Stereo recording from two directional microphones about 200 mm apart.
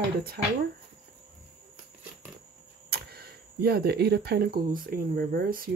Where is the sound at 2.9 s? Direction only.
50° right (ahead or behind).